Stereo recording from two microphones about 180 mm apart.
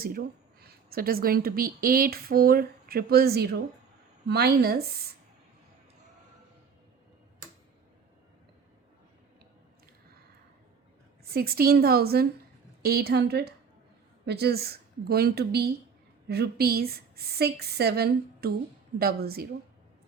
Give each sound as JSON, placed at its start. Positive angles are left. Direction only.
{"t": 0.0, "sound": "a woman's voice", "side_deg": -55}
{"t": 11.3, "sound": "a woman's voice", "side_deg": -60}